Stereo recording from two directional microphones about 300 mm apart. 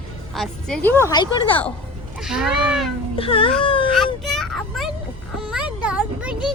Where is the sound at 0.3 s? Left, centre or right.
Centre.